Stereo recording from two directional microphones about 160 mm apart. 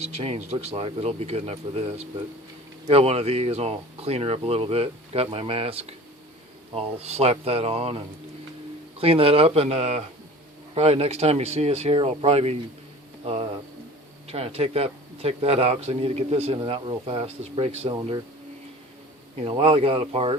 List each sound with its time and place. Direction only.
0.0 s speech: 40° right (ahead or behind)
19.5 s speech: 35° right (ahead or behind)